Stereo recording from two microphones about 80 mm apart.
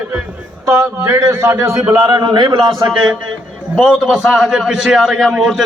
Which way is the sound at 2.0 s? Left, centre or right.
Right.